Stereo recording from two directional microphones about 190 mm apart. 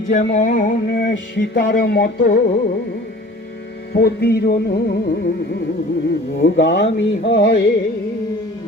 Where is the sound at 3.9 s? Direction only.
55° left (ahead or behind).